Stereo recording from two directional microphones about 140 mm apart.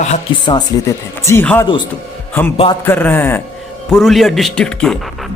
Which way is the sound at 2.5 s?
40° left (ahead or behind).